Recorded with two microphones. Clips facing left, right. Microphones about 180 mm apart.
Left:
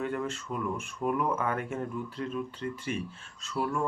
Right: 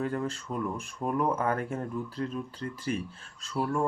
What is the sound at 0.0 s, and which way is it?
Speech, 35° right (ahead or behind).